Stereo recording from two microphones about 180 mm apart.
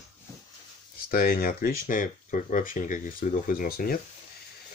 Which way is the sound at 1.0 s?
55° left (ahead or behind).